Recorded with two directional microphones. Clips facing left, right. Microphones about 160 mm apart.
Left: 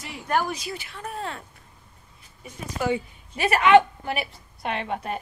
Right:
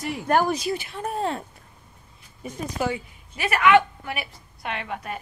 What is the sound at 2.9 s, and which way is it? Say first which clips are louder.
A woman's voice: left 5 dB; 30° left (ahead or behind).